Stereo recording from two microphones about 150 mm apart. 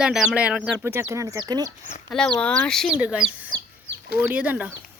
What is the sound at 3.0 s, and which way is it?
Speech, 5° right (ahead or behind).